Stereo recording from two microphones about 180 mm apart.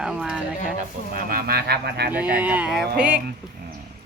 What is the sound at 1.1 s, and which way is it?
Speech, 55° right (ahead or behind).